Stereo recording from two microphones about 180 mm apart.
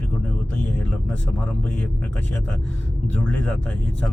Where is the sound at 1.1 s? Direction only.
5° left (ahead or behind).